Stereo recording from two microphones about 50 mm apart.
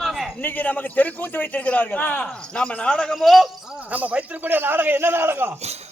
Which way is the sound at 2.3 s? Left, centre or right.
Centre.